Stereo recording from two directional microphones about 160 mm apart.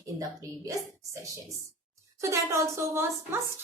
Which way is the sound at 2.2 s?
15° right (ahead or behind).